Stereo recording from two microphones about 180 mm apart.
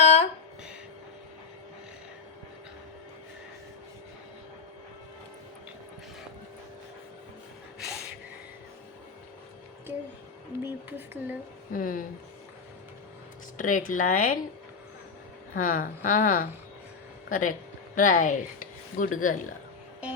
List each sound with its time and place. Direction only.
0.0 s a sound: 35° left (ahead or behind)
10.5 s a sound: 15° right (ahead or behind)
10.8 s speech: 10° right (ahead or behind)
11.7 s speech: 50° left (ahead or behind)
13.6 s speech: 45° left (ahead or behind)
15.5 s speech: 50° left (ahead or behind)